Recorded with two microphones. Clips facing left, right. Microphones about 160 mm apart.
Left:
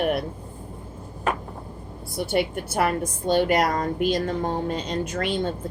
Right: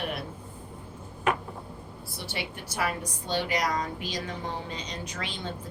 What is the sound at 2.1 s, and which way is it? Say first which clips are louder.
A woman's voice: left 13 dB; 55° left (ahead or behind).